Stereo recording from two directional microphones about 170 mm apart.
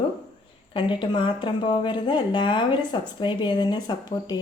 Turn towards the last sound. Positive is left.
turn(degrees=25)  # may be behind; listen again after turning